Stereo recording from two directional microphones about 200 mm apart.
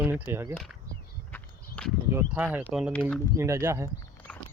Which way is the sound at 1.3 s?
5° left (ahead or behind).